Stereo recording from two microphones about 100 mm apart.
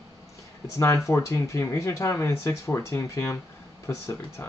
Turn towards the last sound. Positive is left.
turn(degrees=25)  # may be behind; listen again after turning